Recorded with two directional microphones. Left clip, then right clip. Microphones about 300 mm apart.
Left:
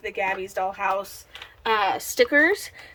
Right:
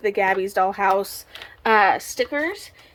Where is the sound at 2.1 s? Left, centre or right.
Centre.